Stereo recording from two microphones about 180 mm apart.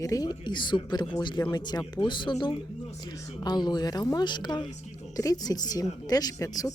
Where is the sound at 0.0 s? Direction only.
20° left (ahead or behind).